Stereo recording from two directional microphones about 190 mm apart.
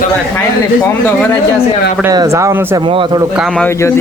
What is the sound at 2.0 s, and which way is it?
Speech, 15° right (ahead or behind).